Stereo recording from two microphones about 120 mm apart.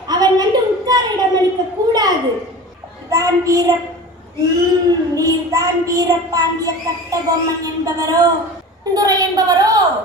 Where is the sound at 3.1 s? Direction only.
30° right (ahead or behind).